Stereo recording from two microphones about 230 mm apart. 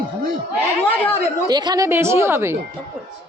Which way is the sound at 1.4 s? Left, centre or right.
Centre.